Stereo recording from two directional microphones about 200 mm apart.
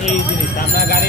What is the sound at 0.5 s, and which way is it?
Speech, 50° left (ahead or behind).